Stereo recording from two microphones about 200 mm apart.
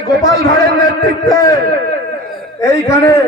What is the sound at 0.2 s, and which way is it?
A man's voice, 15° left (ahead or behind).